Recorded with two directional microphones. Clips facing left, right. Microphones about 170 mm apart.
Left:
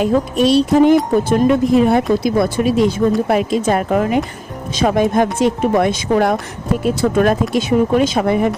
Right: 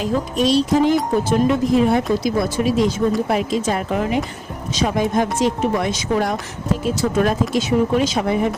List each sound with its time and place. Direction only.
0.0 s speech: 60° left (ahead or behind)